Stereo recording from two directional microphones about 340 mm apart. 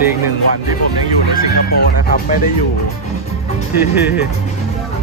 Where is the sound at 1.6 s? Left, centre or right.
Left.